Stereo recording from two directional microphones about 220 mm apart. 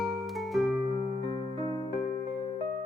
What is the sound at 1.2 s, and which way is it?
Music, 20° left (ahead or behind).